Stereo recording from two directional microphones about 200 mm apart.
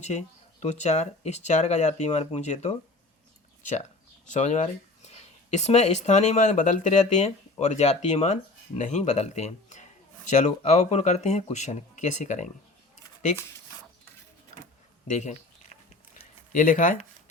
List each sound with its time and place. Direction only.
0.0 s speech: 35° left (ahead or behind)
4.3 s speech: 35° left (ahead or behind)
16.6 s speech: 40° left (ahead or behind)